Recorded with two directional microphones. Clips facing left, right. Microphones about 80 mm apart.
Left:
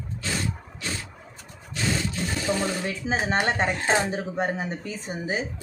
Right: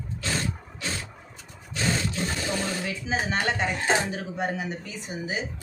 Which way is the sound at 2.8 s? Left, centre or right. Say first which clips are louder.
Left 2 dB; left.